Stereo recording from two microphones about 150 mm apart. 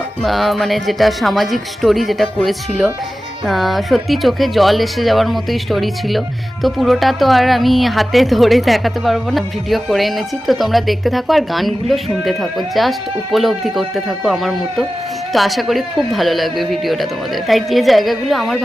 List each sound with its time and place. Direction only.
0.2 s speech: centre (ahead or behind)